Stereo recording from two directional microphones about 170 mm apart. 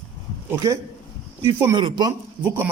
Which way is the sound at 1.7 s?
25° right (ahead or behind).